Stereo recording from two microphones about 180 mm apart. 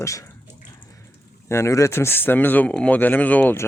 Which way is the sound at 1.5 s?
15° left (ahead or behind).